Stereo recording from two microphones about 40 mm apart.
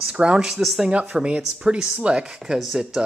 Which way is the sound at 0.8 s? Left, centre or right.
Right.